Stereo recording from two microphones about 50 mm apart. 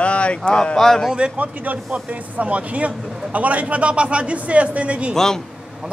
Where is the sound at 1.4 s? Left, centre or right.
Right.